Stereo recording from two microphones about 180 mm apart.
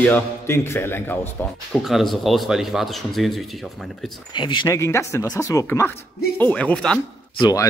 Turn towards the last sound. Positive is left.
turn(degrees=20)  # may be behind; listen again after turning